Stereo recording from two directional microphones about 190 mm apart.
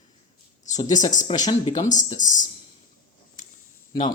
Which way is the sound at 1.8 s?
40° left (ahead or behind).